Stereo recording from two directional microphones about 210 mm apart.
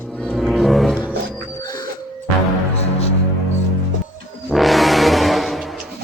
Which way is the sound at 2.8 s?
30° left (ahead or behind).